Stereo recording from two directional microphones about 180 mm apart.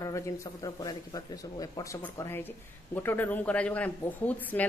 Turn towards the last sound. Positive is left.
turn(degrees=10)  # may be behind; listen again after turning